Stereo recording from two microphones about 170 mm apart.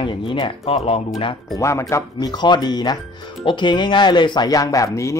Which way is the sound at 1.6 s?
15° left (ahead or behind).